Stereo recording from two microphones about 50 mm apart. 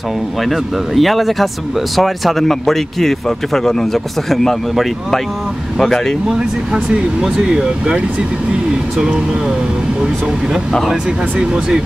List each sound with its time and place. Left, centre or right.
0.4 s speech: centre
6.3 s speech: centre
10.9 s speech: centre